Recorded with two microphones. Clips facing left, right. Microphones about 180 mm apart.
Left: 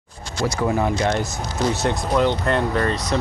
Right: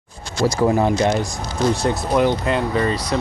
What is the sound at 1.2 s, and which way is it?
Speech, centre (ahead or behind).